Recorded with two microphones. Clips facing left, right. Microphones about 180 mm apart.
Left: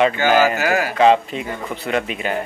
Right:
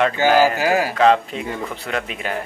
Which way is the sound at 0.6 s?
30° right (ahead or behind).